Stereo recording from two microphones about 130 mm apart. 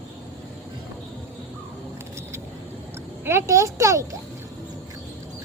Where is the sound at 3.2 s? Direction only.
20° right (ahead or behind).